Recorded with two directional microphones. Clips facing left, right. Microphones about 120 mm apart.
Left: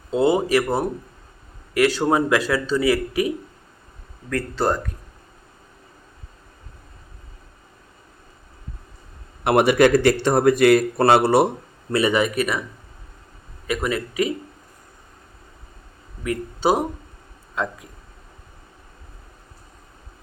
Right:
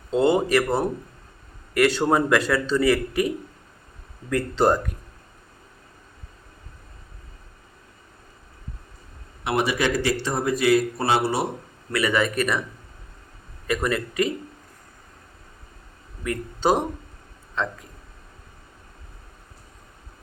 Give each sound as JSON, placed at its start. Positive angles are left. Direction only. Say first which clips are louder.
{"t": 0.1, "sound": "a man's voice", "louder": "left 1 dB", "side_deg": 5}
{"t": 4.3, "sound": "speech", "louder": "right 2 dB", "side_deg": -15}
{"t": 9.4, "sound": "speech", "louder": "left 8 dB", "side_deg": 55}
{"t": 11.9, "sound": "speech", "louder": "left 3 dB", "side_deg": 25}
{"t": 12.3, "sound": "speech", "louder": "left 1 dB", "side_deg": 5}
{"t": 13.7, "sound": "a man's voice", "louder": "even", "side_deg": 5}
{"t": 16.2, "sound": "speech", "louder": "left 2 dB", "side_deg": 5}